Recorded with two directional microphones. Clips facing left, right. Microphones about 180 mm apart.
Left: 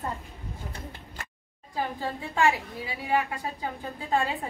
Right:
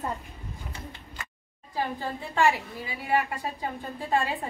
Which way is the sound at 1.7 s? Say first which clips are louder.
Even; centre (ahead or behind).